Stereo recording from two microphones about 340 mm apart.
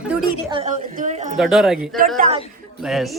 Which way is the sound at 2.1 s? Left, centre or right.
Right.